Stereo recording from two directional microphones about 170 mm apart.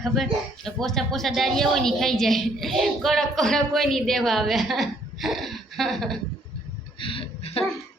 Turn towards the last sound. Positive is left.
turn(degrees=35)  # may be behind; listen again after turning